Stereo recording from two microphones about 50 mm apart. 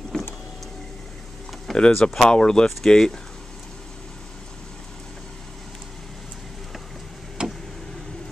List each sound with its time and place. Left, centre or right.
0.1 s power windows: centre
1.7 s speech: centre
7.4 s vehicle: centre